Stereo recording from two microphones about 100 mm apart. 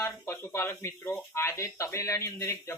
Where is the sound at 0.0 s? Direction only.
25° left (ahead or behind).